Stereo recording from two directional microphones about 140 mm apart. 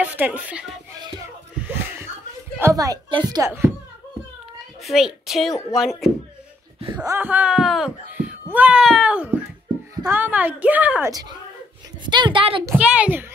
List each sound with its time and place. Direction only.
0.0 s speech: 10° right (ahead or behind)
1.6 s chuckle: 15° right (ahead or behind)
2.6 s speech: 25° right (ahead or behind)
3.1 s a woman's voice: 35° right (ahead or behind)
3.4 s a child's voice: 15° right (ahead or behind)
4.8 s speech: 5° right (ahead or behind)
6.8 s a sound: 45° right (ahead or behind)
7.2 s a child's voice: 10° right (ahead or behind)
11.1 s a woman's voice: 25° right (ahead or behind)
12.7 s a woman's voice: 10° right (ahead or behind)